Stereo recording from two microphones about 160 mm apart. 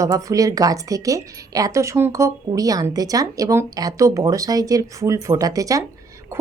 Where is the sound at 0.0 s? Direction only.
20° right (ahead or behind).